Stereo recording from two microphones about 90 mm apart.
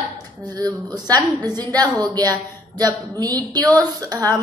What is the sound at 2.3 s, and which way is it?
A woman's voice, 40° right (ahead or behind).